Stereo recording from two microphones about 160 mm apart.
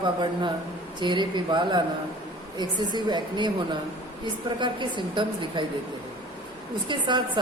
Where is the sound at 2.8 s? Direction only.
25° right (ahead or behind).